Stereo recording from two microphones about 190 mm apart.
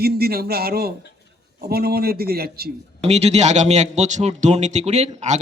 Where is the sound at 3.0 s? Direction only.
35° right (ahead or behind).